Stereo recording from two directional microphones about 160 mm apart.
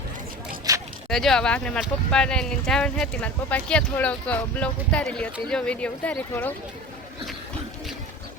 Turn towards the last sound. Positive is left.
turn(degrees=10)  # may be behind; listen again after turning